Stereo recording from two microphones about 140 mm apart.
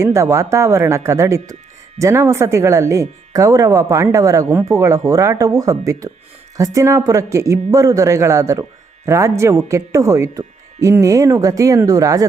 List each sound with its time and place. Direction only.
0.0 s speech: 20° right (ahead or behind)